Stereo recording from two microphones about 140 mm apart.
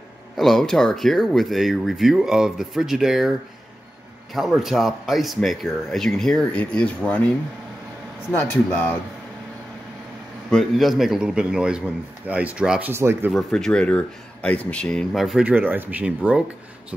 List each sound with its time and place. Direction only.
0.4 s speech: centre (ahead or behind)
8.3 s speech: 15° left (ahead or behind)
10.5 s speech: centre (ahead or behind); by 13.3 s 15° right (ahead or behind)
13.3 s speech: 5° left (ahead or behind)